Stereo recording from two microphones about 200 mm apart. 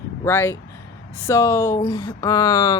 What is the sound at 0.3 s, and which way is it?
Speech, 10° left (ahead or behind).